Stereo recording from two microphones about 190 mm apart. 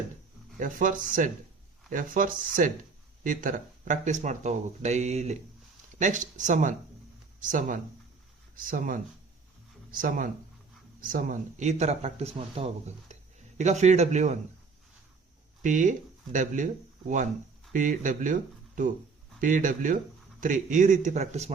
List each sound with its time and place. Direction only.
0.6 s speech: 45° right (ahead or behind)
15.6 s speech: 40° right (ahead or behind)
17.7 s speech: 45° right (ahead or behind)
19.4 s speech: 45° right (ahead or behind)